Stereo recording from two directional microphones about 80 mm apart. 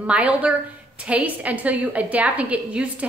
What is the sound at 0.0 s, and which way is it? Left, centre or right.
A woman's voice, centre.